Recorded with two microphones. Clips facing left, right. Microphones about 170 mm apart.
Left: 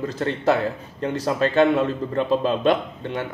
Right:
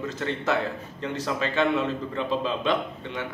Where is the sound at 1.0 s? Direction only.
45° left (ahead or behind).